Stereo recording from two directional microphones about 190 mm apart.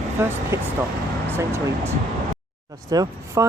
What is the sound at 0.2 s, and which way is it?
Speech, 15° right (ahead or behind).